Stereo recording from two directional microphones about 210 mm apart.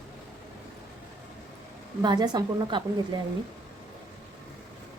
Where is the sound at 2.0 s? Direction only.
20° right (ahead or behind).